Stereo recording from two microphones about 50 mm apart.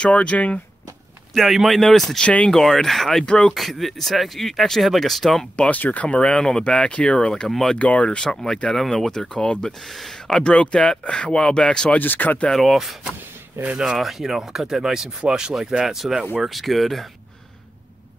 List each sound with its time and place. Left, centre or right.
0.0 s speech: left
1.3 s speech: centre
2.1 s speech: left
2.5 s speech: centre
3.3 s speech: centre
3.8 s speech: centre
5.6 s speech: left
7.4 s speech: centre
7.7 s speech: left
8.2 s speech: centre
12.0 s speech: left
12.5 s speech: centre